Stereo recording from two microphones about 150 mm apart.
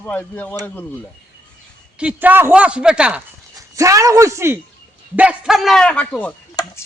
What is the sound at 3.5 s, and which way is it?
Speech, 20° right (ahead or behind).